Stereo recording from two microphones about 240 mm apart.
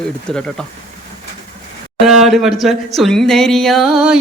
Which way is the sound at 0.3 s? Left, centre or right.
Centre.